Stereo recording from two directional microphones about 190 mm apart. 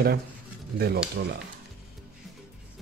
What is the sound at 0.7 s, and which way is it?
Speech, 55° right (ahead or behind).